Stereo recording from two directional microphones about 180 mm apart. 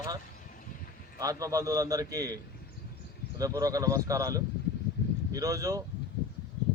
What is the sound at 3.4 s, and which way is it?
Speech, 20° right (ahead or behind).